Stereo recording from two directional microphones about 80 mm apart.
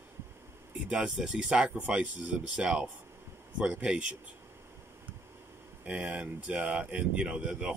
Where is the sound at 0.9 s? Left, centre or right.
Centre.